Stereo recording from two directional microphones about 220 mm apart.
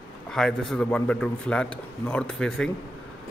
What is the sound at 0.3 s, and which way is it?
Speech, 5° left (ahead or behind).